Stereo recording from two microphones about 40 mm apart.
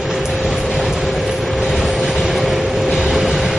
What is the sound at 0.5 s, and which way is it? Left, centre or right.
Vehicle, centre.